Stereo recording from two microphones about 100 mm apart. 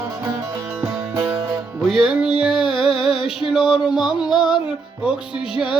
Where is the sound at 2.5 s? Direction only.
60° left (ahead or behind).